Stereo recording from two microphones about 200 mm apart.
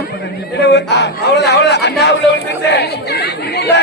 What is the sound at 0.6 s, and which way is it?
A man's voice, 55° left (ahead or behind).